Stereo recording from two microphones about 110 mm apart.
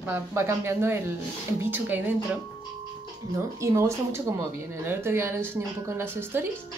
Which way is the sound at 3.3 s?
30° right (ahead or behind).